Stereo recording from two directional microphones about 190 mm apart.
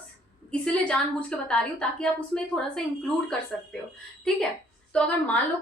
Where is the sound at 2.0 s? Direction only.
5° left (ahead or behind).